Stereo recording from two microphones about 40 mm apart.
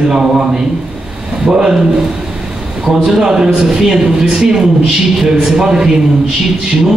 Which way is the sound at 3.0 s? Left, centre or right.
Centre.